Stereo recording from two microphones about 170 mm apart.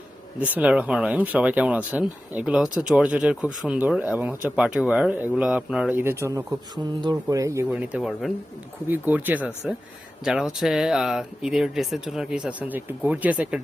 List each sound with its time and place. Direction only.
0.3 s speech: 10° right (ahead or behind)
7.7 s speech: 5° right (ahead or behind)